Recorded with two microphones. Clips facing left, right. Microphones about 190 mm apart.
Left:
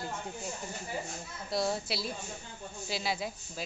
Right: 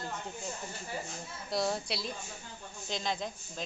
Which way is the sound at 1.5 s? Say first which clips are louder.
Left 1 dB; centre (ahead or behind).